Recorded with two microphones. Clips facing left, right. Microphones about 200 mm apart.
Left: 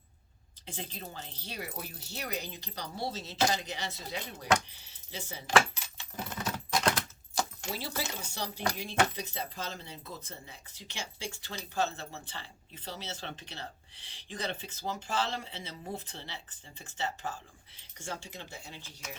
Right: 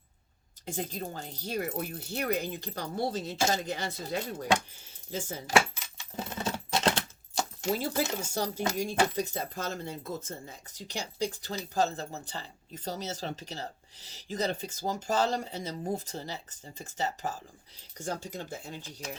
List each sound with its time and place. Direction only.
0.6 s speech: 45° right (ahead or behind)
6.1 s keys jangling: 25° right (ahead or behind)
7.6 s speech: 50° right (ahead or behind)